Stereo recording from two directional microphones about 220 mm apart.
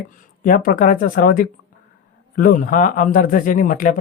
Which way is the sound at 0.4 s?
40° left (ahead or behind).